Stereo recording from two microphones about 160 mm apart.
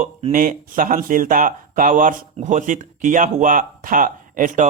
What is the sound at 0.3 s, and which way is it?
Speech, 60° right (ahead or behind).